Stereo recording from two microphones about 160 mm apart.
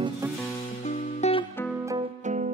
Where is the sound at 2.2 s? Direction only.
50° right (ahead or behind).